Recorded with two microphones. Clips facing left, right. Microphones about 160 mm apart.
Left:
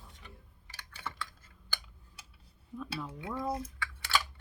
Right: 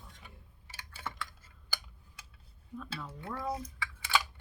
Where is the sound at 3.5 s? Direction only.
5° right (ahead or behind).